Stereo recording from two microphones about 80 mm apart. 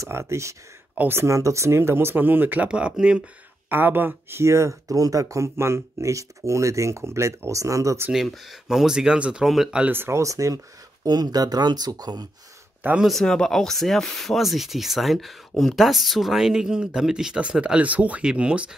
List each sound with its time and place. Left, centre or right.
0.0 s speech: right; by 3.3 s centre
3.6 s speech: right
8.1 s speech: centre
9.8 s speech: right
11.1 s speech: right
13.0 s speech: centre